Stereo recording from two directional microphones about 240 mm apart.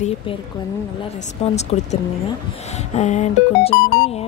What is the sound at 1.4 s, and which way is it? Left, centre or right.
Speech, left.